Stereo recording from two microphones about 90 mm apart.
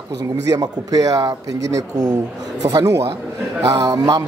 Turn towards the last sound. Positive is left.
turn(degrees=-45)  # may be behind; listen again after turning